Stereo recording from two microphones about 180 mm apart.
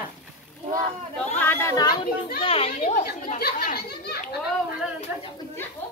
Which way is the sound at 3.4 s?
60° left (ahead or behind).